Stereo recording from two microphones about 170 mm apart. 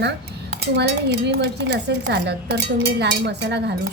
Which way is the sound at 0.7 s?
80° right.